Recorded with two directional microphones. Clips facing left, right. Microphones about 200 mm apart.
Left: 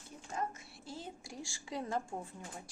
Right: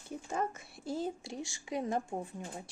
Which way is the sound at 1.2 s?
20° right (ahead or behind).